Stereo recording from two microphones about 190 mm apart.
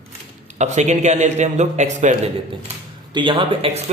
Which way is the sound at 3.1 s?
25° right (ahead or behind).